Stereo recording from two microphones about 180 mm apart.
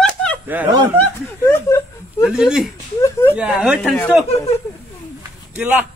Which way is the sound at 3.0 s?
15° left (ahead or behind).